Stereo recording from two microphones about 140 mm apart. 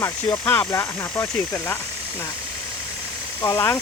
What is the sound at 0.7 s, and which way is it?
Speech, 20° left (ahead or behind).